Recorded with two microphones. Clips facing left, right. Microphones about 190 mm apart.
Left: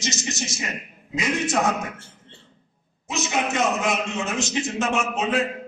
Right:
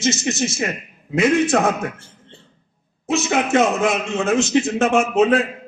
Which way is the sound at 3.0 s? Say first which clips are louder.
Right 6 dB; 55° right (ahead or behind).